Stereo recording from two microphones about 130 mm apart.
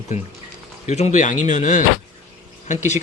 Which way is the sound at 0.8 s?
60° left (ahead or behind).